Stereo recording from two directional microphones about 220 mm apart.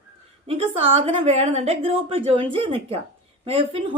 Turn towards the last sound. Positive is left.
turn(degrees=-25)  # may be behind; listen again after turning